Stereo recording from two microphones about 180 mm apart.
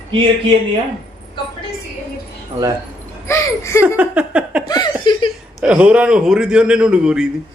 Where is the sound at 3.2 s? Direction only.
15° left (ahead or behind).